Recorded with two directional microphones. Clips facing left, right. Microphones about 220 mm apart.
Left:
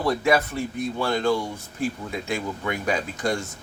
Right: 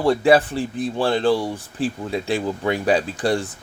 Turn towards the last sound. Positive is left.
turn(degrees=-35)  # may be behind; listen again after turning